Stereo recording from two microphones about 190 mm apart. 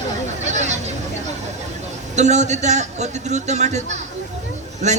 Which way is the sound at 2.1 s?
35° right (ahead or behind).